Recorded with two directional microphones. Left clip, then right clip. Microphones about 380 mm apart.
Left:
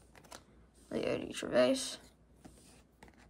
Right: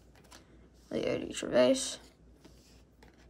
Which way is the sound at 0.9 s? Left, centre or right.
Centre.